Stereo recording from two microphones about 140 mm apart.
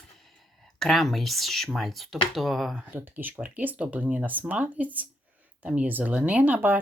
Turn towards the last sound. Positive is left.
turn(degrees=-15)  # may be behind; listen again after turning